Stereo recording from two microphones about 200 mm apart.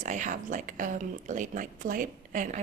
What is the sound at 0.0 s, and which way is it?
A woman's voice, 40° right (ahead or behind).